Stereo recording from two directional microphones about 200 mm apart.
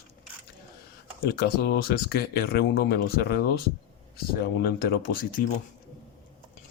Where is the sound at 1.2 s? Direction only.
50° left (ahead or behind).